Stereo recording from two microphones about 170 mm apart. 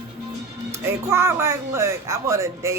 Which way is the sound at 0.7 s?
15° right (ahead or behind).